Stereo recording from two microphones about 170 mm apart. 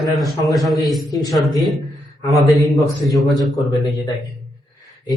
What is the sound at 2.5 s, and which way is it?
A man's voice, centre (ahead or behind).